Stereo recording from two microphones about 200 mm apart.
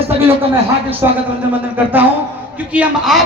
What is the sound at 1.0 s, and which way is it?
A man's voice, 10° right (ahead or behind).